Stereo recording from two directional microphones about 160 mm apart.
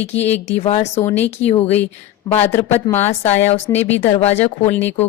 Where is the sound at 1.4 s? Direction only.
40° left (ahead or behind).